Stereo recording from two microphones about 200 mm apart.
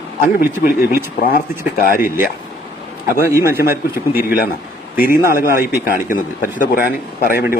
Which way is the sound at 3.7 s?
50° left (ahead or behind).